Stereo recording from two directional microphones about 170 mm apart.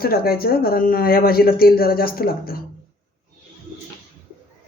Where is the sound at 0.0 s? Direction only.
60° left (ahead or behind).